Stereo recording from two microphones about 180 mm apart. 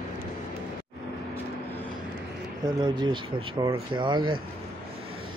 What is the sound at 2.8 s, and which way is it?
Speech, 25° right (ahead or behind).